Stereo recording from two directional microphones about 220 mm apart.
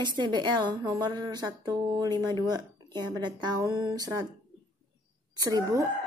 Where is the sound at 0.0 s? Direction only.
20° right (ahead or behind).